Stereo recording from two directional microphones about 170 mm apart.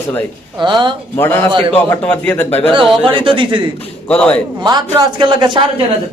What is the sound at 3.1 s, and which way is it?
Speech, 30° right (ahead or behind).